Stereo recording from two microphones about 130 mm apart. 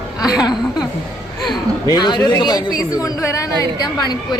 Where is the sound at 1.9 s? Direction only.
35° left (ahead or behind).